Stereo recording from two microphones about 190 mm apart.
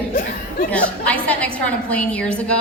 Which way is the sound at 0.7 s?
5° left (ahead or behind).